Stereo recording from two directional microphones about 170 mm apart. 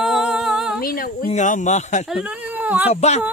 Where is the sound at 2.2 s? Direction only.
10° right (ahead or behind).